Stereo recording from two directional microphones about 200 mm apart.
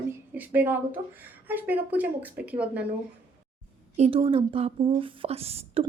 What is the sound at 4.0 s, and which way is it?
Speech, 25° right (ahead or behind).